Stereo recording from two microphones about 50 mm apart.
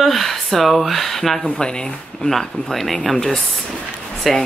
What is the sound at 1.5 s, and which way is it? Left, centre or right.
Speech, centre.